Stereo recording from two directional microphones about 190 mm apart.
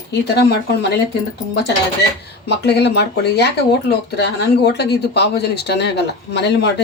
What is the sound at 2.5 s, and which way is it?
Speech, 60° left (ahead or behind).